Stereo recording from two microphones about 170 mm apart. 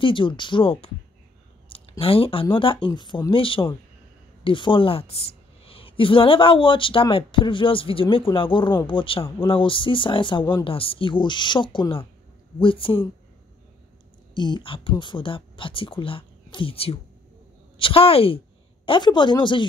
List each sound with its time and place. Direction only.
0.0 s speech: 30° left (ahead or behind)
1.7 s a sound: 35° left (ahead or behind)
2.5 s a woman's voice: 30° left (ahead or behind)
14.3 s a woman's voice: 25° left (ahead or behind)